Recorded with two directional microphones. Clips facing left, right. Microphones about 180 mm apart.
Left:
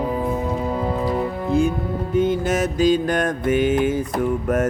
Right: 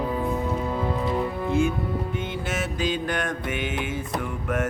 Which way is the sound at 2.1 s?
40° left (ahead or behind).